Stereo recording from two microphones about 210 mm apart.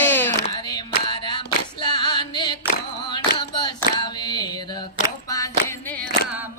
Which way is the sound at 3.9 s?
20° left (ahead or behind).